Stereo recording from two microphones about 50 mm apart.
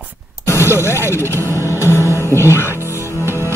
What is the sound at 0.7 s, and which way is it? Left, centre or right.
Speech, left.